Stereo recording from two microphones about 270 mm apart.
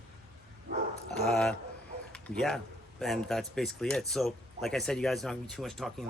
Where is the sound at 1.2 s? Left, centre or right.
Centre.